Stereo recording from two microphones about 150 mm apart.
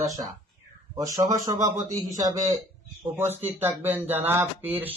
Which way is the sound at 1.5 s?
55° right (ahead or behind).